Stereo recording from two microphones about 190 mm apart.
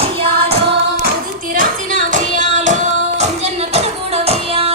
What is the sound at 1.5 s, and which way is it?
Music, 45° right (ahead or behind).